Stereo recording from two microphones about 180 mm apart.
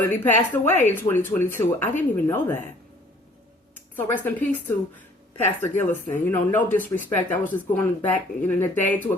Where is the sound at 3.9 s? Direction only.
10° left (ahead or behind).